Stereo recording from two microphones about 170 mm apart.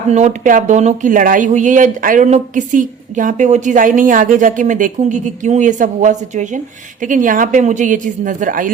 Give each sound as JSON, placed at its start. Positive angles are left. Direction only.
{"t": 0.1, "sound": "speech", "side_deg": -45}